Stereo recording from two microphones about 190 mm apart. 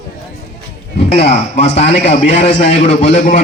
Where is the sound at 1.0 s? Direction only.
35° left (ahead or behind).